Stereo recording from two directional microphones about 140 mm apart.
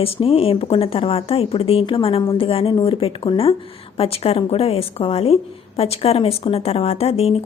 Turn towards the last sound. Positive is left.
turn(degrees=45)  # may be behind; listen again after turning